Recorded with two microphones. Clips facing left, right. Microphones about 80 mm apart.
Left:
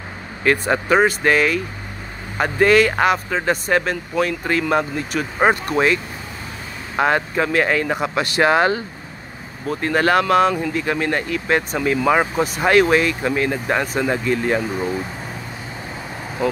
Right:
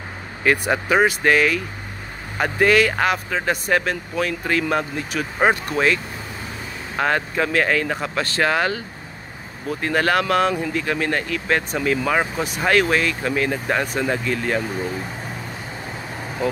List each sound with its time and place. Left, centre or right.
0.4 s speech: centre
7.0 s speech: centre
8.5 s speech: left
9.7 s speech: centre